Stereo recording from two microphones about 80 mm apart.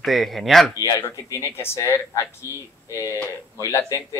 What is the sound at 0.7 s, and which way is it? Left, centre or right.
Speech, left.